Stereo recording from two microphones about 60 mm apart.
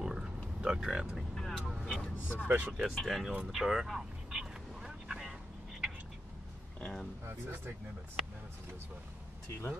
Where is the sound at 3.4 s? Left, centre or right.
Centre.